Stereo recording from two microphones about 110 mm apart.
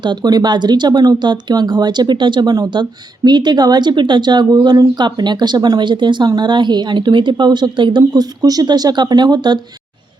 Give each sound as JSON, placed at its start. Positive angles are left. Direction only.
{"t": 0.0, "sound": "speech", "side_deg": -40}